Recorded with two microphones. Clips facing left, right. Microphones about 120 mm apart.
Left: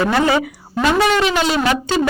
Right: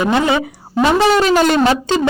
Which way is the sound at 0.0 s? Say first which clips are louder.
Right 1 dB; 20° right (ahead or behind).